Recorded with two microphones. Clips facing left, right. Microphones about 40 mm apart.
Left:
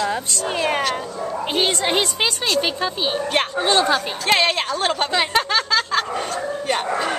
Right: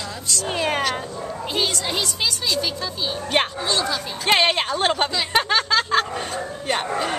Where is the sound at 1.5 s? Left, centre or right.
Left.